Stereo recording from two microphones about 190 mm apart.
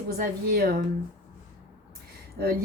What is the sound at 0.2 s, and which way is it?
Speech, 55° right (ahead or behind).